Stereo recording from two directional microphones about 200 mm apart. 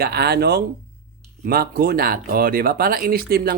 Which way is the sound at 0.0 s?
50° right (ahead or behind).